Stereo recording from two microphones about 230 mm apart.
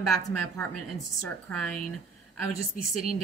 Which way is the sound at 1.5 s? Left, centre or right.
Centre.